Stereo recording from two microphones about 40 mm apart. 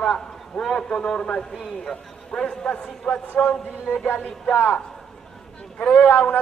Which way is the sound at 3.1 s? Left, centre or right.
Left.